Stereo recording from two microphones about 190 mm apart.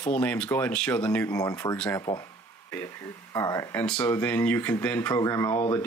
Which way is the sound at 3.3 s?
15° left (ahead or behind).